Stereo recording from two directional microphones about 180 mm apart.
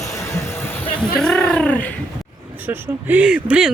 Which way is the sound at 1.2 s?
5° left (ahead or behind).